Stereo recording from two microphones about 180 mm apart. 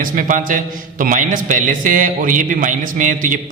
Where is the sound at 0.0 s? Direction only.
50° right (ahead or behind).